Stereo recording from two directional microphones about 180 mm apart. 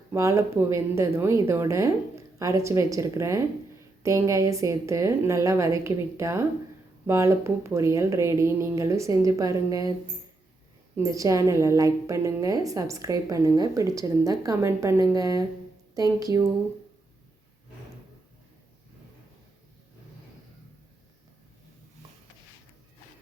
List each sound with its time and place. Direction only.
0.1 s a woman's voice: 15° right (ahead or behind)
10.9 s a woman's voice: 20° right (ahead or behind)